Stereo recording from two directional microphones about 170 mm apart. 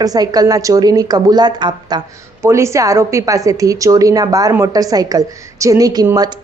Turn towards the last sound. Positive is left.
turn(degrees=-20)  # may be behind; listen again after turning